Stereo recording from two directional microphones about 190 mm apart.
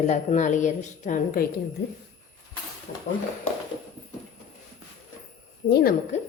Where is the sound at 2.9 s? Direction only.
45° left (ahead or behind).